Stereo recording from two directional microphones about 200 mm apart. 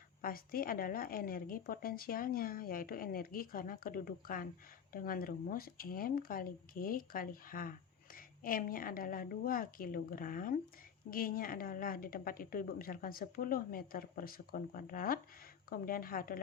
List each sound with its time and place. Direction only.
0.2 s speech: 45° left (ahead or behind)